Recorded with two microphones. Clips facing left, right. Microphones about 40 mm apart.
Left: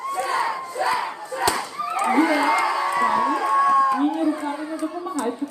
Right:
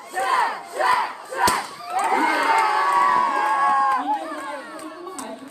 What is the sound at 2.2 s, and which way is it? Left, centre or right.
Crowd, centre.